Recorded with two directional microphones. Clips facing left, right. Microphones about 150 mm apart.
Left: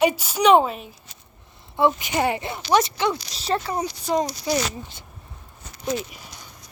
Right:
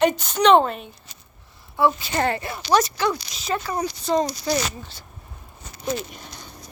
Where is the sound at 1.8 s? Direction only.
20° left (ahead or behind).